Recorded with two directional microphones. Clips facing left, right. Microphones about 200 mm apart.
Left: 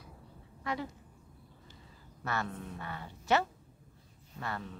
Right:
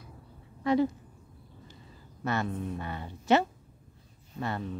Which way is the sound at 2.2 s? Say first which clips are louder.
Right 6 dB; 20° right (ahead or behind).